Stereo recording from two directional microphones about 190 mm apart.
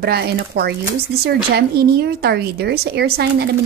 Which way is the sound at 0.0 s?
55° right (ahead or behind).